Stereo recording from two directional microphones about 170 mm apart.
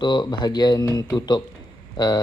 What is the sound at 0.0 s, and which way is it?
Speech, 25° left (ahead or behind).